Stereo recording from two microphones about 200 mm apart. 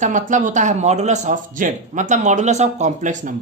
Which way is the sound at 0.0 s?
40° right (ahead or behind).